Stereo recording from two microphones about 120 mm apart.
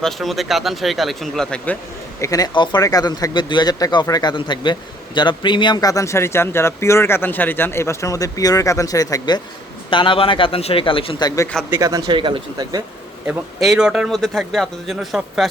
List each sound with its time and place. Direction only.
0.0 s speech: centre (ahead or behind)
2.2 s speech: 30° left (ahead or behind)
2.5 s speech: 40° left (ahead or behind)
9.9 s a man's voice: 45° left (ahead or behind)
11.8 s speech: 30° right (ahead or behind)
13.6 s speech: 5° right (ahead or behind)